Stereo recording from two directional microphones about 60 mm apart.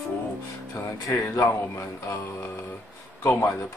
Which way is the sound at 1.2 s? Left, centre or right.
Left.